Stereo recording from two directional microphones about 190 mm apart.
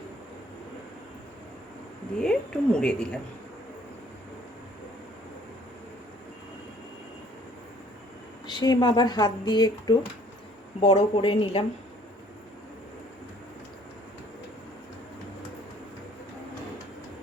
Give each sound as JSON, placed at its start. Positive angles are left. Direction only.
{"t": 2.1, "sound": "a woman's voice", "side_deg": 5}
{"t": 8.4, "sound": "speech", "side_deg": 20}
{"t": 10.8, "sound": "speech", "side_deg": 35}